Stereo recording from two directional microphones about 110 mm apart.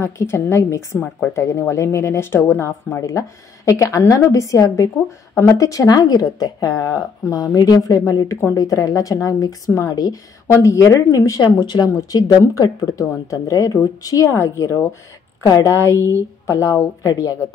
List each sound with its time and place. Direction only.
0.0 s speech: 25° left (ahead or behind)